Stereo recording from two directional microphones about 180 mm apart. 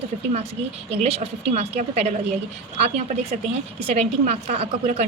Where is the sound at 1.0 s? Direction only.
35° right (ahead or behind).